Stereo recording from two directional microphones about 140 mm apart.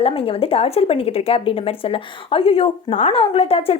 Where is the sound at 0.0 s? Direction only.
45° left (ahead or behind).